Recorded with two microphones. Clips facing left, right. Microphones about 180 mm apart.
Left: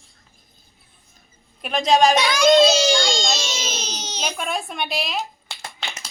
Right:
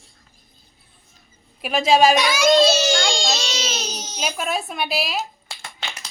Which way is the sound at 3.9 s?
75° left (ahead or behind).